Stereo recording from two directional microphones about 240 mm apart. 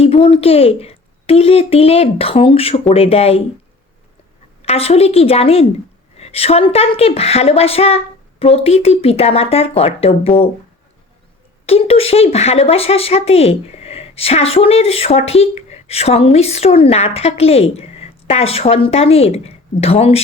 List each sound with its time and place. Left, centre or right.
0.0 s speech: left
4.6 s speech: left
11.6 s speech: left